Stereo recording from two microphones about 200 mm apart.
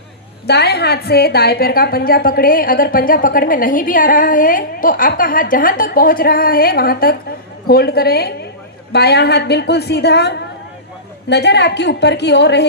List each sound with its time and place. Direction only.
0.4 s a woman's voice: 55° left (ahead or behind)